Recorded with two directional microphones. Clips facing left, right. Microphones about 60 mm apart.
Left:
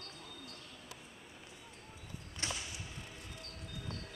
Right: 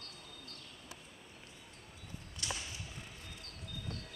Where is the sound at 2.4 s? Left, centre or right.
Left.